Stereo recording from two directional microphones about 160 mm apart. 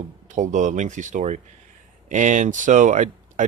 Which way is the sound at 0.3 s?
50° right (ahead or behind).